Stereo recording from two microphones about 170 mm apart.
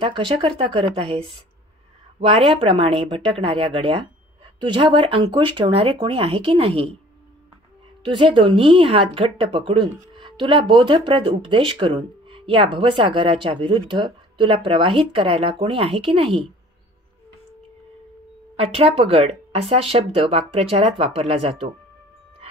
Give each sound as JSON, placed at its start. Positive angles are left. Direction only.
{"t": 0.0, "sound": "speech", "side_deg": -30}
{"t": 8.0, "sound": "speech", "side_deg": -30}
{"t": 18.6, "sound": "speech", "side_deg": -35}